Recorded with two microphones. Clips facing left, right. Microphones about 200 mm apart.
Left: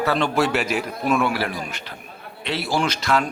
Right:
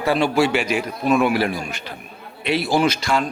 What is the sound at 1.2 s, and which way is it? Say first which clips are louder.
A man's voice: right 4 dB; 20° right (ahead or behind).